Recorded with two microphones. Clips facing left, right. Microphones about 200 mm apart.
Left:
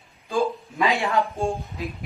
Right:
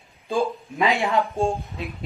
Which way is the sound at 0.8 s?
15° right (ahead or behind).